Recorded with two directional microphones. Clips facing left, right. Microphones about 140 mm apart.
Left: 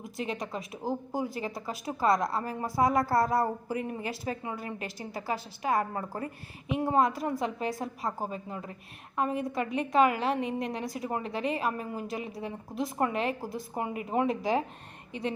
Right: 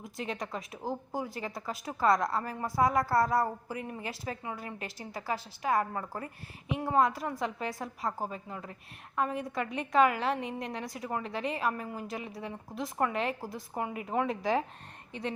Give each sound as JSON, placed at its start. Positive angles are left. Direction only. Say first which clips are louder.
{"t": 0.3, "sound": "a woman's voice", "louder": "left 2 dB", "side_deg": 10}